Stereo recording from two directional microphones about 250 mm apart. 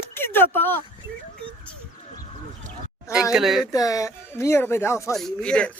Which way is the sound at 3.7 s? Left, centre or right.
Centre.